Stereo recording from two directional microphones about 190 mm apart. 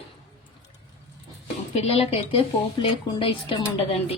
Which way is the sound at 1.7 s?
30° left (ahead or behind).